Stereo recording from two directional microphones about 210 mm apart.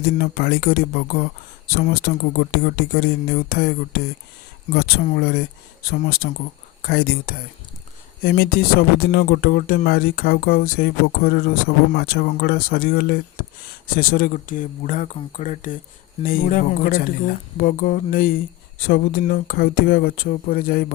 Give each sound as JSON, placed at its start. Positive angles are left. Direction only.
{"t": 0.2, "sound": "speech", "side_deg": 50}